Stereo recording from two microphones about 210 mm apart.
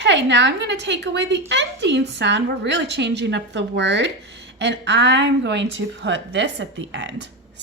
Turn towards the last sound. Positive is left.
turn(degrees=-60)  # may be behind; listen again after turning